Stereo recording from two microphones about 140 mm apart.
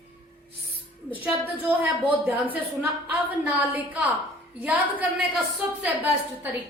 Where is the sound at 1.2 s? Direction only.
10° right (ahead or behind).